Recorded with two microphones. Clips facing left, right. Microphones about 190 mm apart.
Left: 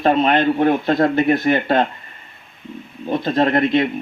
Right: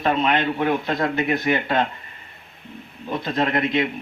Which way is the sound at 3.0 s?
30° left (ahead or behind).